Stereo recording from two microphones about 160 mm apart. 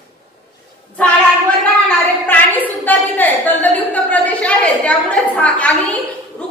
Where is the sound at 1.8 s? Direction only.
10° left (ahead or behind).